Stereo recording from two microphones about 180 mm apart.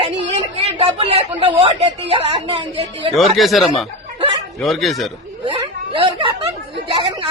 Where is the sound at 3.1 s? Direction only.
Centre (ahead or behind).